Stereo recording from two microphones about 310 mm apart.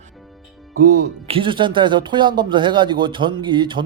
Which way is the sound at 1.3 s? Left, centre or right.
Centre.